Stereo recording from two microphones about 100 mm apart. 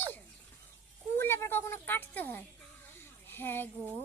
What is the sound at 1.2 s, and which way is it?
A child's voice, 25° left (ahead or behind).